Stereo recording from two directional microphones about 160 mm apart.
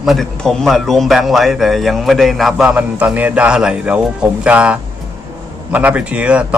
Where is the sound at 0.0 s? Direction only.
Centre (ahead or behind).